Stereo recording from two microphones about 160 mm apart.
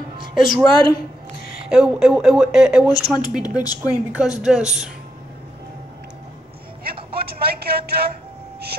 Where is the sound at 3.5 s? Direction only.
25° left (ahead or behind).